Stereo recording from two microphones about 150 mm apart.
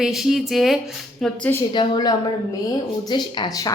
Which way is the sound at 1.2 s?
10° left (ahead or behind).